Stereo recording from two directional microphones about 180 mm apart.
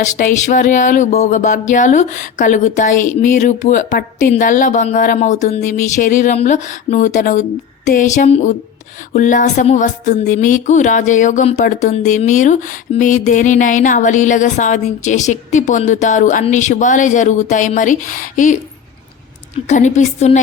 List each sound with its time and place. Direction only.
0.0 s speech: 45° left (ahead or behind)
19.6 s a woman's voice: 40° left (ahead or behind)